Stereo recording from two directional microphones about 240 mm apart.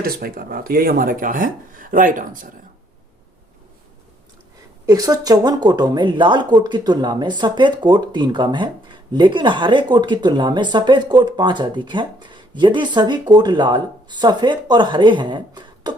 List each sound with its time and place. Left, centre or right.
0.0 s speech: right
4.9 s speech: centre